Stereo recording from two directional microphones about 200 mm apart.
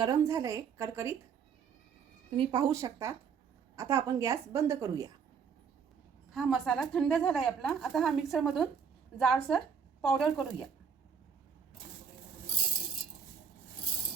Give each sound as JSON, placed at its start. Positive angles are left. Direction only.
{"t": 0.0, "sound": "a woman's voice", "side_deg": -15}
{"t": 2.3, "sound": "a woman's voice", "side_deg": -25}
{"t": 6.3, "sound": "a woman's voice", "side_deg": 0}